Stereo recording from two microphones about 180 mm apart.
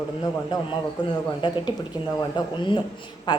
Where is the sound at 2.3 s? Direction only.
25° left (ahead or behind).